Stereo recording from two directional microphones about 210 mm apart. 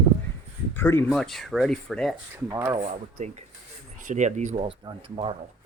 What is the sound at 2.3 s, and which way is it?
Speech, 15° right (ahead or behind).